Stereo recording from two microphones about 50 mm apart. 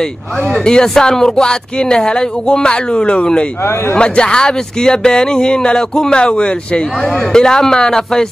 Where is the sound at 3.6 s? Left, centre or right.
Left.